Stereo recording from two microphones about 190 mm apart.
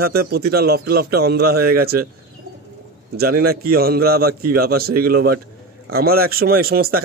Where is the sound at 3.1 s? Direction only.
55° right (ahead or behind).